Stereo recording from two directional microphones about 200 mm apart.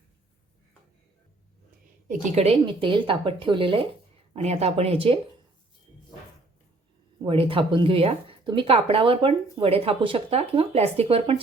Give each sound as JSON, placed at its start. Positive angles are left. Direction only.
{"t": 2.0, "sound": "speech", "side_deg": -30}
{"t": 7.3, "sound": "speech", "side_deg": -25}